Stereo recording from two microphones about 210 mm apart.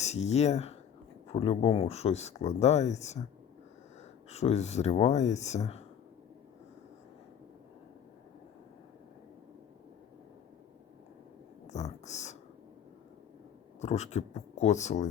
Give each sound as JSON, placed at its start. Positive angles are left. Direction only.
{"t": 0.0, "sound": "speech", "side_deg": 30}
{"t": 4.3, "sound": "speech", "side_deg": 30}
{"t": 11.7, "sound": "a sound", "side_deg": 35}
{"t": 13.8, "sound": "speech", "side_deg": 30}